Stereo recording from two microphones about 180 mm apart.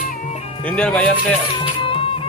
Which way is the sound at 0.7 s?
5° left (ahead or behind).